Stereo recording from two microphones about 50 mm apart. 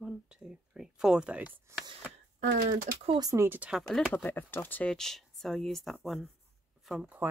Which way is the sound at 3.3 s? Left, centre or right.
Right.